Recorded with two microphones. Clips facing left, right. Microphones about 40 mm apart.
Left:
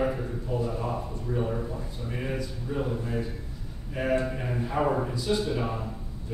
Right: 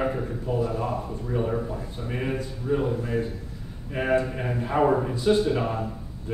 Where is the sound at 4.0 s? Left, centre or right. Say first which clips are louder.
Right 2 dB; right.